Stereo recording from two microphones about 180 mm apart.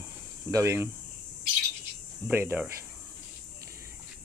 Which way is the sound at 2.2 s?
10° right (ahead or behind).